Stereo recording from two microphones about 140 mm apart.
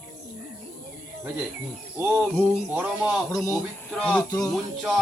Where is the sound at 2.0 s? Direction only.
15° right (ahead or behind).